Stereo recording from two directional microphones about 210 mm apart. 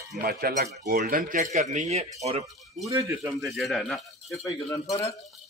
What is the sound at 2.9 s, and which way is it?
Speech, 15° right (ahead or behind).